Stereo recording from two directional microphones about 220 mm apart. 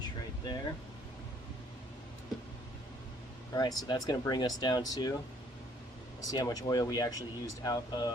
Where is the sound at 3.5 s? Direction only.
15° left (ahead or behind).